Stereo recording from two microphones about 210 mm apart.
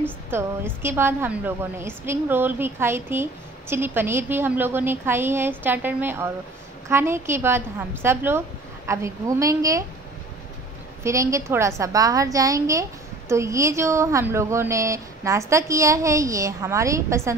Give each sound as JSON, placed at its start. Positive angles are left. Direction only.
{"t": 0.3, "sound": "a woman's voice", "side_deg": -10}
{"t": 11.1, "sound": "a woman's voice", "side_deg": -15}